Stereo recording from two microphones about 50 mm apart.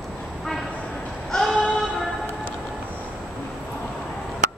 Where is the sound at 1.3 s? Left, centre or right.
Centre.